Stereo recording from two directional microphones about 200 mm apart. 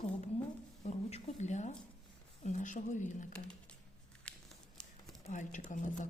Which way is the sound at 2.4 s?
35° left (ahead or behind).